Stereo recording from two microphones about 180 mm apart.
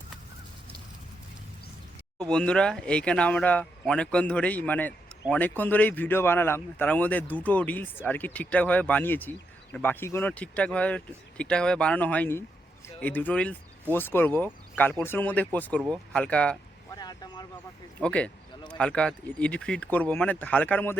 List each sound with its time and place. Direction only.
2.1 s speech: 5° left (ahead or behind)
16.9 s vehicle: 20° left (ahead or behind)
18.0 s speech: 5° left (ahead or behind)